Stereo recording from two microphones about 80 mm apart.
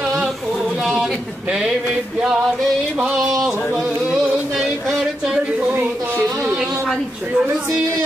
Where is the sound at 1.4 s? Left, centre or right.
Centre.